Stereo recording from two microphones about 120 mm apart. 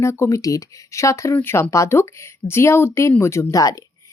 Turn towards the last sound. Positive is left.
turn(degrees=25)  # may be behind; listen again after turning